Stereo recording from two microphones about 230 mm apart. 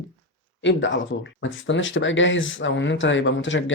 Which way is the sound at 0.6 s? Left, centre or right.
Left.